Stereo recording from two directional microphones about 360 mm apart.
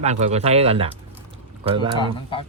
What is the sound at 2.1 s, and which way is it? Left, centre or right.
Speech, centre.